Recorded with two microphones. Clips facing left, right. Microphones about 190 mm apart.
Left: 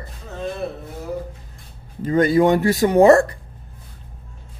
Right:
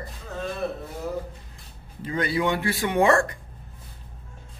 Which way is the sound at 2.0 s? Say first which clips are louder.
Left 10 dB; 45° left (ahead or behind).